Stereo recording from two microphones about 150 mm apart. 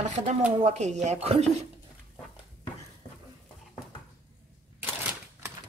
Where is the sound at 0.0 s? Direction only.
50° right (ahead or behind).